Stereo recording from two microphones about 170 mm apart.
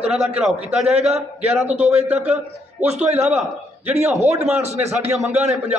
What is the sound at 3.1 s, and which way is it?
A man's voice, 10° right (ahead or behind).